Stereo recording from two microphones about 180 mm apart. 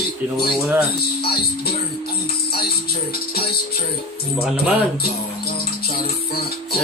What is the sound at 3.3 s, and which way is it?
Music, 60° left (ahead or behind).